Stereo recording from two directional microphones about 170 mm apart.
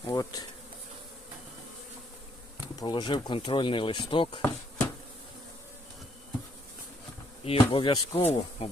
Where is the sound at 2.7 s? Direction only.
25° left (ahead or behind).